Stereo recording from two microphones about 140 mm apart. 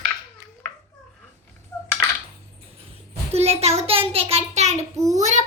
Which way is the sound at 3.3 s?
45° right (ahead or behind).